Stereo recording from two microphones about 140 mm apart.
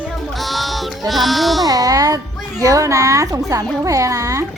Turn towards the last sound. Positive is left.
turn(degrees=-25)  # may be behind; listen again after turning